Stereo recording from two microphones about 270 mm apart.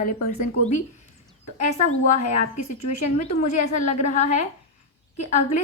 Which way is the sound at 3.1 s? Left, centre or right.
Left.